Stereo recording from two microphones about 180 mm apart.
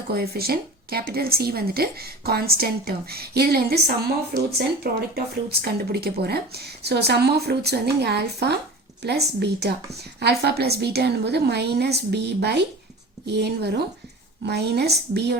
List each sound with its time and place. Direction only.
0.1 s a woman's voice: 60° right (ahead or behind)